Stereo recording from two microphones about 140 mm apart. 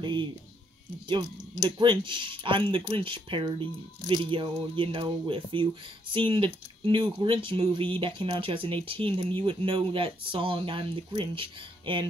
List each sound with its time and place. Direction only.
0.0 s speech: 35° right (ahead or behind)
1.8 s speech: 35° right (ahead or behind)